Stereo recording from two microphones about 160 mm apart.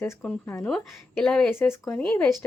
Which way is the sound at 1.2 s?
5° left (ahead or behind).